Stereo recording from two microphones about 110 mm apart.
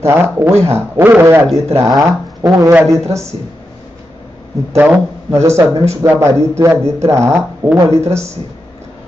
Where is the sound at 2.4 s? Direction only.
35° right (ahead or behind).